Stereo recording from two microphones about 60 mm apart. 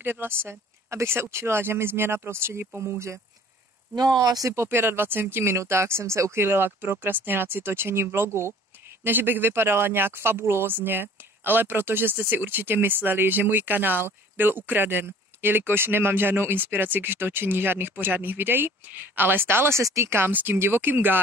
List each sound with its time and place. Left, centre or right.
0.0 s speech: right
0.8 s speech: right
2.9 s speech: right
4.2 s speech: right
4.6 s speech: right
19.8 s speech: right
20.1 s speech: right